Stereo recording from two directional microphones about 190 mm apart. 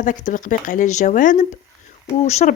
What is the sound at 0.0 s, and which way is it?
Speech, 45° left (ahead or behind).